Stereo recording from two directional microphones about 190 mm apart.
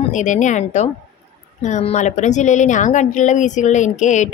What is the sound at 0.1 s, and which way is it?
A woman's voice, 40° left (ahead or behind).